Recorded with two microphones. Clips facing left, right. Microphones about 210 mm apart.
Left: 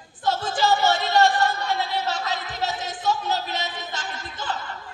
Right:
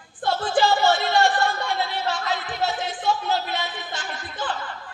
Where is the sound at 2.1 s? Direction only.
40° left (ahead or behind).